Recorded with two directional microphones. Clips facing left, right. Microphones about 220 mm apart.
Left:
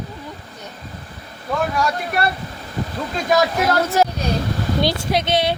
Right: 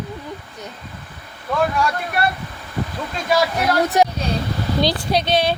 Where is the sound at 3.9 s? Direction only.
20° right (ahead or behind).